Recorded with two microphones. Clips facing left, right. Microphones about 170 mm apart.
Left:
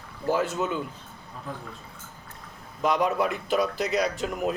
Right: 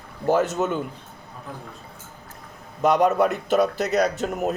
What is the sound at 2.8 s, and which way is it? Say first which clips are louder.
Speech: right 6 dB; 50° right (ahead or behind).